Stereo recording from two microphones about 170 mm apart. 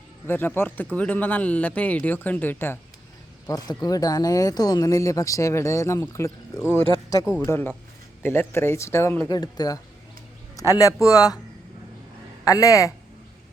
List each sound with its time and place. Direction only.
0.3 s speech: 15° left (ahead or behind)
12.5 s speech: 20° left (ahead or behind)